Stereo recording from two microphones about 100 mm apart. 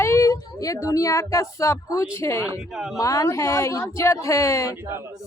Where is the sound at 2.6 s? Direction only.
5° right (ahead or behind).